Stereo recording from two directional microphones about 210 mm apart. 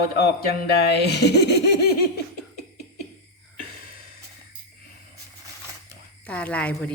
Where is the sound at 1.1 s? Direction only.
50° left (ahead or behind).